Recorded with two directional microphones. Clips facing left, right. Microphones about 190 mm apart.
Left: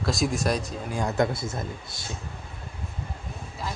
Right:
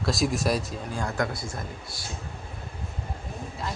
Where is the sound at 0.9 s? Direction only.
20° left (ahead or behind).